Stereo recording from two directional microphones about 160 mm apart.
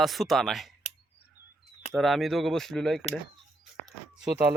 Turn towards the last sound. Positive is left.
turn(degrees=-5)  # may be behind; listen again after turning